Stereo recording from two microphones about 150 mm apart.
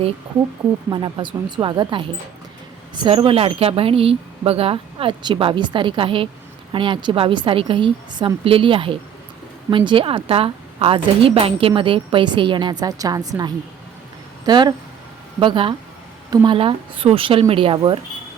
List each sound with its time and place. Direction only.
0.9 s a woman's voice: 30° right (ahead or behind)